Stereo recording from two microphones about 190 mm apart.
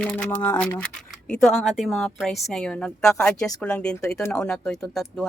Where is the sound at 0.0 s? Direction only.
5° left (ahead or behind).